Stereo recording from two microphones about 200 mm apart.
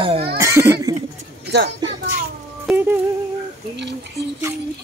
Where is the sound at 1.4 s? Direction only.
55° right (ahead or behind).